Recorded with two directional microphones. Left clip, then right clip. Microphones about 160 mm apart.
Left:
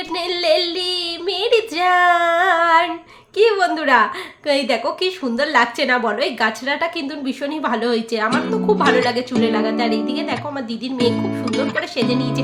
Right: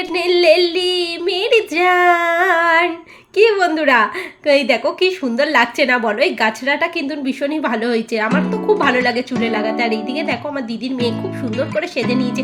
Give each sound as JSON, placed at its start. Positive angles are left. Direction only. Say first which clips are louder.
{"t": 0.1, "sound": "female singing", "louder": "right 5 dB", "side_deg": -15}
{"t": 3.3, "sound": "a woman's voice", "louder": "right 2 dB", "side_deg": -15}